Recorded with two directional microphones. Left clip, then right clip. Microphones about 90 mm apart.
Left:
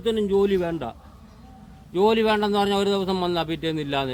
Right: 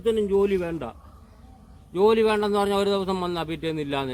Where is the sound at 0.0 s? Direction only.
15° left (ahead or behind).